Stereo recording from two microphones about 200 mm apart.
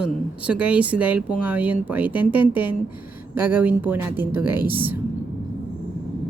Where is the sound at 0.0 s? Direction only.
5° right (ahead or behind).